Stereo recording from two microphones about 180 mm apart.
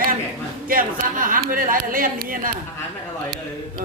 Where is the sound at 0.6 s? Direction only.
50° right (ahead or behind).